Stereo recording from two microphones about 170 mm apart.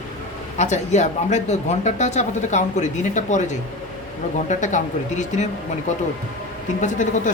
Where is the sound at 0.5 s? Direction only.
45° left (ahead or behind).